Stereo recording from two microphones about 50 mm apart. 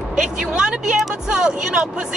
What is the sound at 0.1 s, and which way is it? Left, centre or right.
Speech, centre.